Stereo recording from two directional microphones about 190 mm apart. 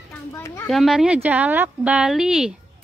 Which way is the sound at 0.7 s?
Centre (ahead or behind).